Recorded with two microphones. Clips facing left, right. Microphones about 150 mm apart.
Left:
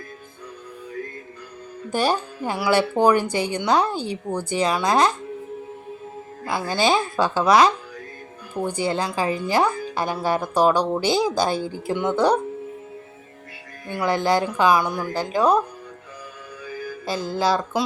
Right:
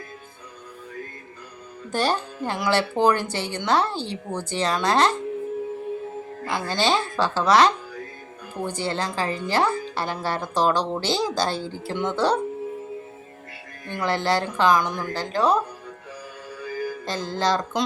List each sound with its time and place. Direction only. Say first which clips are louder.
1.9 s speech: left 2 dB; 10° left (ahead or behind)
6.4 s speech: left 2 dB; 10° left (ahead or behind)
13.8 s speech: left 3 dB; 10° left (ahead or behind)
17.1 s speech: left 3 dB; 10° left (ahead or behind)